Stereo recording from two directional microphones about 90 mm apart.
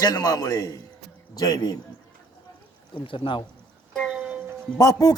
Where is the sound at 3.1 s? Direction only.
70° left (ahead or behind).